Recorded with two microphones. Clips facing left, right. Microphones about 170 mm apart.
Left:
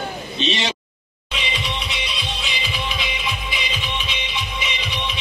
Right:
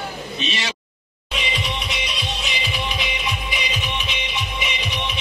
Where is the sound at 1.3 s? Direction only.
45° right (ahead or behind).